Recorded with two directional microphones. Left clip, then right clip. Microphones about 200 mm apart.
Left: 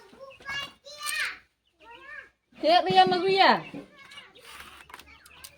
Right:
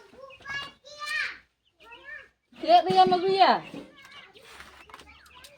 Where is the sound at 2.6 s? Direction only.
60° left (ahead or behind).